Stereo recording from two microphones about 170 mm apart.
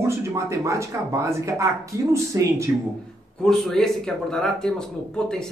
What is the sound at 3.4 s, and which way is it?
Speech, centre (ahead or behind).